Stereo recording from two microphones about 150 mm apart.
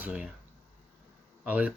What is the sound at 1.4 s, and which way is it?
Speech, 10° right (ahead or behind).